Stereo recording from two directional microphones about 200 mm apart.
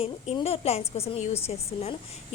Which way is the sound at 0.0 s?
30° left (ahead or behind).